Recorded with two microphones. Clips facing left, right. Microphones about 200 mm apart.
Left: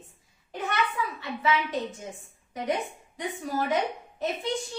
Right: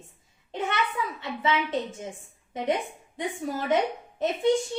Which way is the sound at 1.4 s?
25° right (ahead or behind).